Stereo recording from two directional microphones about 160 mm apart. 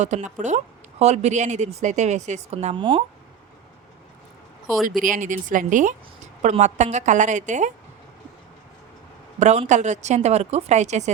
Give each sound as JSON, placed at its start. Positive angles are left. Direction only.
{"t": 0.0, "sound": "speech", "side_deg": -45}
{"t": 5.0, "sound": "speech", "side_deg": -55}
{"t": 9.4, "sound": "speech", "side_deg": -45}